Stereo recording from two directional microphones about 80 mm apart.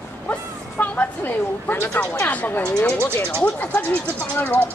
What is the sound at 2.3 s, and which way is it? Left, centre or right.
Speech, left.